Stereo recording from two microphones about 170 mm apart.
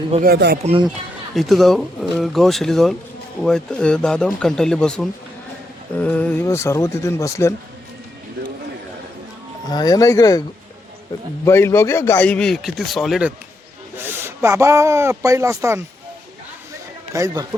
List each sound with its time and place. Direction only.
0.2 s speech: 70° right (ahead or behind)
0.6 s speech: 35° right (ahead or behind)
1.4 s a man's voice: centre (ahead or behind); by 7.5 s 20° left (ahead or behind)
9.6 s speech: 25° left (ahead or behind)
11.4 s a man's voice: 15° left (ahead or behind); by 13.3 s 5° right (ahead or behind)
14.0 s speech: 15° right (ahead or behind)
17.1 s a man's voice: 20° right (ahead or behind)